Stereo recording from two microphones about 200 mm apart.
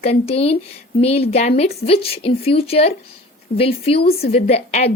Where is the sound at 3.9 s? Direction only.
50° left (ahead or behind).